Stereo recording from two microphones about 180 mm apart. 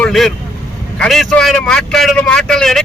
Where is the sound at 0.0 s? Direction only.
Centre (ahead or behind).